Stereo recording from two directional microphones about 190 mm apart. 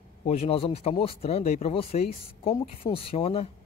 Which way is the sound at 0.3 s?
30° left (ahead or behind).